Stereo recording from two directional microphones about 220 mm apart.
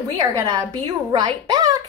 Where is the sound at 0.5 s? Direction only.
20° right (ahead or behind).